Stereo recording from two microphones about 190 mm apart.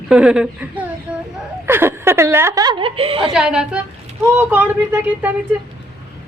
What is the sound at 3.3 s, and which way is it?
A woman's voice, 5° right (ahead or behind).